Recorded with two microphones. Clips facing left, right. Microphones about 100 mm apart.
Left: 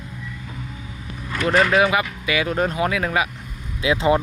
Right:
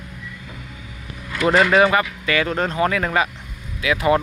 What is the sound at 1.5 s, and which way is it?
Speech, centre (ahead or behind).